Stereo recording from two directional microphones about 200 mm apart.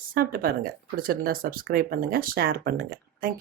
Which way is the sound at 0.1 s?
45° right (ahead or behind).